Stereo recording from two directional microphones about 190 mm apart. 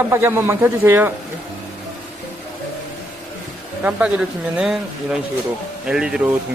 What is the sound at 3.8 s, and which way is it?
A man's voice, 10° right (ahead or behind).